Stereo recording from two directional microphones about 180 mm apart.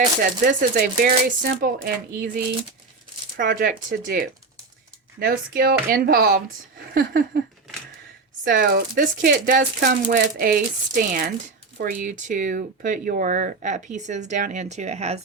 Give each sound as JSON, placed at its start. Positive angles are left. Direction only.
{"t": 0.4, "sound": "speech", "side_deg": -50}
{"t": 8.4, "sound": "speech", "side_deg": -55}